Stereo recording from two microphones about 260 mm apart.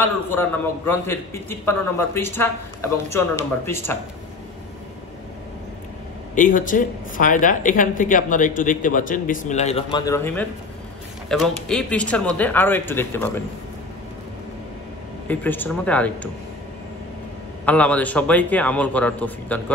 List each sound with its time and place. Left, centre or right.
0.0 s a man's voice: centre
6.3 s speech: left; by 13.4 s centre
15.2 s speech: centre
17.6 s speech: centre